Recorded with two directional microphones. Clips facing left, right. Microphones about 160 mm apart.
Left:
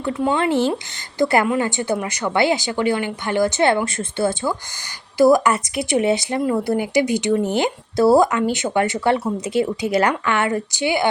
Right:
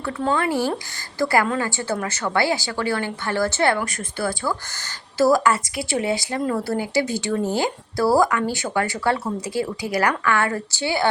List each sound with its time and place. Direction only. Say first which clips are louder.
0.0 s speech: left 3 dB; 15° left (ahead or behind)